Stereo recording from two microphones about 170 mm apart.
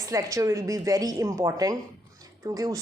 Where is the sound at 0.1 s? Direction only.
20° right (ahead or behind).